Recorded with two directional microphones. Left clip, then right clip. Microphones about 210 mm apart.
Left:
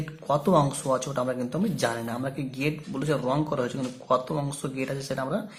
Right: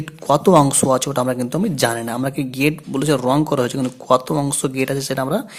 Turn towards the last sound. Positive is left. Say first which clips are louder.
# right 9 dB
turn(degrees=-45)  # may be behind; listen again after turning